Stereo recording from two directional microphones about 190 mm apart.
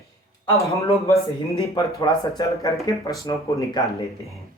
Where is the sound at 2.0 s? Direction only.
20° left (ahead or behind).